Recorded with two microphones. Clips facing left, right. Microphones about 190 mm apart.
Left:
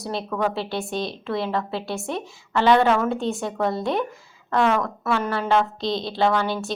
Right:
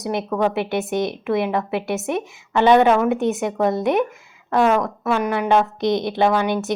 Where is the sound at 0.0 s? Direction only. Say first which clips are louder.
Right 4 dB; 20° right (ahead or behind).